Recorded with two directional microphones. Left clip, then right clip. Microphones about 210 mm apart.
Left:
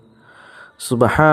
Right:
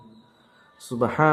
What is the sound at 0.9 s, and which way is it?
Speech, 45° left (ahead or behind).